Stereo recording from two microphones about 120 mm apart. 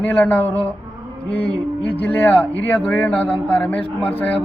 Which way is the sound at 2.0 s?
20° left (ahead or behind).